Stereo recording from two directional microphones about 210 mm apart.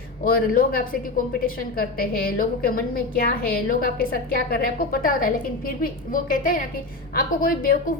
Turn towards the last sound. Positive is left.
turn(degrees=45)  # may be behind; listen again after turning